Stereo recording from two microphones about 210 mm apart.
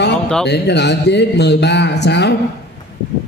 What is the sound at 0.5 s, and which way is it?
Speech, 55° left (ahead or behind).